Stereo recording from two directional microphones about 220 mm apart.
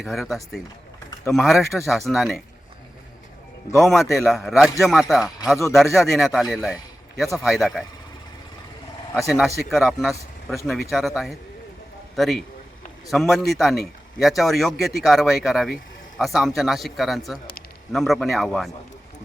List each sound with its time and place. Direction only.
0.0 s a man's voice: centre (ahead or behind)
3.8 s a man's voice: centre (ahead or behind)
9.1 s a man's voice: centre (ahead or behind)